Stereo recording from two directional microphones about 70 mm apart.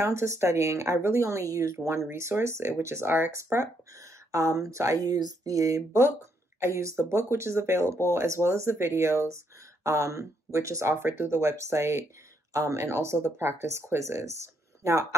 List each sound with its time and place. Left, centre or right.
0.0 s speech: right
11.0 s speech: right